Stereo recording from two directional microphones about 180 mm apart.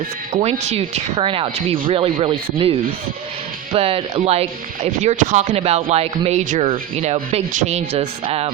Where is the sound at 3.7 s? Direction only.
35° right (ahead or behind).